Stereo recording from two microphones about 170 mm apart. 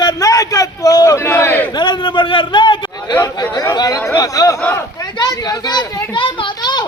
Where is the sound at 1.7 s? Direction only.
25° left (ahead or behind).